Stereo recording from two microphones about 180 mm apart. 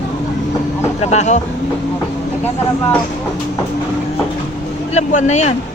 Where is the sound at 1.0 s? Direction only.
40° left (ahead or behind).